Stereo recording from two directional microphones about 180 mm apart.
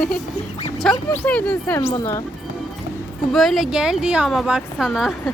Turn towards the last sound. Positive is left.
turn(degrees=0)  # may be behind; listen again after turning